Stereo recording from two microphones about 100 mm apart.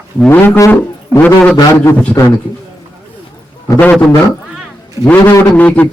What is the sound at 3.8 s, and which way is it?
Speech, 15° left (ahead or behind).